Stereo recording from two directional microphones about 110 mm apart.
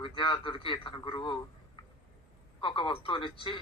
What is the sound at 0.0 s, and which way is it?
A man's voice, 50° left (ahead or behind).